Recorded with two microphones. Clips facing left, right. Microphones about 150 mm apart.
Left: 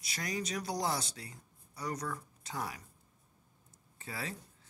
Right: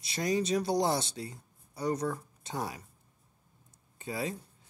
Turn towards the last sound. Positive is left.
turn(degrees=-20)  # may be behind; listen again after turning